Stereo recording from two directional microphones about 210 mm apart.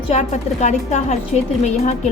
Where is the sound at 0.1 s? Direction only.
35° left (ahead or behind).